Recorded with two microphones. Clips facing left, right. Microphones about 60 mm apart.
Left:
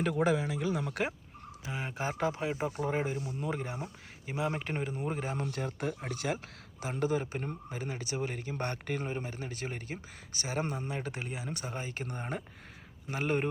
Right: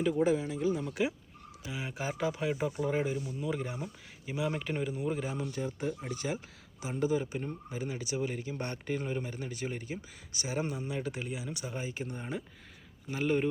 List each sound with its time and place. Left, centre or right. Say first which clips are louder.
0.0 s speech: right 1 dB; left
1.6 s speech: left 1 dB; left
2.4 s speech: right 1 dB; left
2.6 s speech: even; left
5.5 s speech: even; left
9.0 s speech: right 1 dB; left
13.1 s speech: right 2 dB; left